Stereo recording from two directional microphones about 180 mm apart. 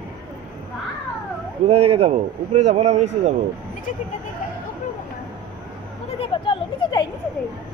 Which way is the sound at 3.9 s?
45° left (ahead or behind).